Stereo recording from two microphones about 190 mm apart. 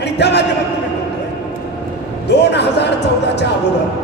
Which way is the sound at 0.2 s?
60° left (ahead or behind).